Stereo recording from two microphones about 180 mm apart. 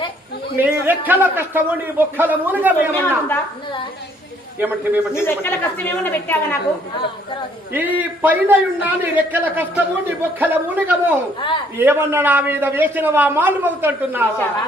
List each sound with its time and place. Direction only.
0.5 s a man's voice: 10° right (ahead or behind)
3.0 s a woman's voice: 10° left (ahead or behind)
5.1 s a woman's voice: 15° left (ahead or behind)
7.7 s a man's voice: 10° right (ahead or behind)
11.3 s a woman's voice: 25° left (ahead or behind)
11.8 s a man's voice: 15° right (ahead or behind)